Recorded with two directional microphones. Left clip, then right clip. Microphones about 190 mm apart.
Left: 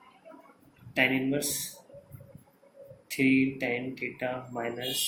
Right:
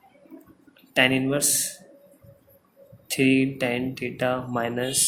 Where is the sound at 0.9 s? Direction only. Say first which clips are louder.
Right 6 dB; 50° right (ahead or behind).